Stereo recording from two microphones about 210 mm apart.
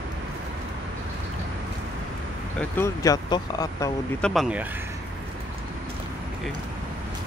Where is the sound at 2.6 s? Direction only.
10° left (ahead or behind).